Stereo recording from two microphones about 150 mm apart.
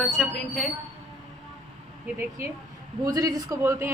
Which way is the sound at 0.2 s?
Centre (ahead or behind).